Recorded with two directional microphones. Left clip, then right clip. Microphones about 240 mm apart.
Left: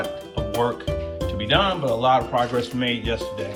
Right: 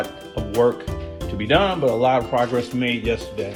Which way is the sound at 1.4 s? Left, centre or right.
Right.